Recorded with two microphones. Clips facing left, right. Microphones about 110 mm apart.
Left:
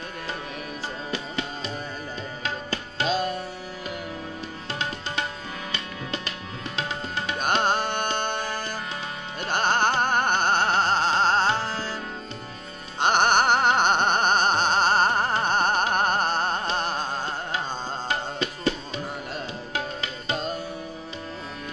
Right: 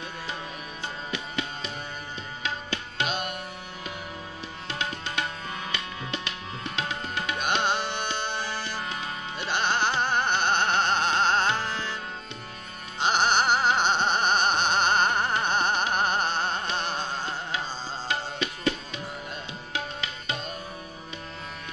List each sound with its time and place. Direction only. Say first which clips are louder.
2.7 s tabla: left 6 dB; 35° left (ahead or behind)
7.3 s music: left 4 dB; 40° left (ahead or behind)
13.0 s music: left 3 dB; 55° left (ahead or behind); by 18.7 s 35° left (ahead or behind)
20.0 s music: left 4 dB; 35° left (ahead or behind)